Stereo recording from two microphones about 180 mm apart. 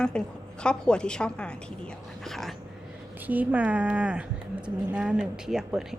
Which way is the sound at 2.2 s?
Centre (ahead or behind).